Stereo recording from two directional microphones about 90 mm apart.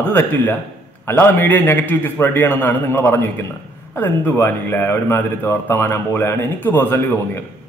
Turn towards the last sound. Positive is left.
turn(degrees=20)  # may be behind; listen again after turning